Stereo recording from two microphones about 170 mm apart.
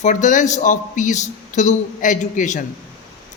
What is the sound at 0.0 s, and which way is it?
A man's voice, 45° left (ahead or behind).